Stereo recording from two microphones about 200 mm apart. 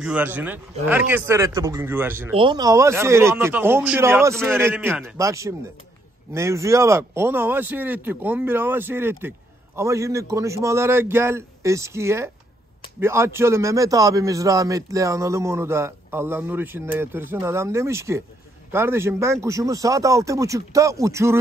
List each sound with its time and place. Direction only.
0.0 s a man's voice: 10° right (ahead or behind)
2.3 s a man's voice: 25° right (ahead or behind)